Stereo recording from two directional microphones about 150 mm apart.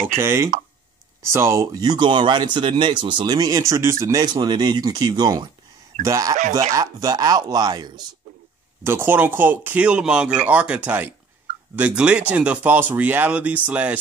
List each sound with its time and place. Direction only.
0.2 s speech: 20° right (ahead or behind)
8.8 s speech: 15° right (ahead or behind)